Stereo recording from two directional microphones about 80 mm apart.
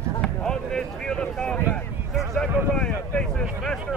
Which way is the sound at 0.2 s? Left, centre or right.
Centre.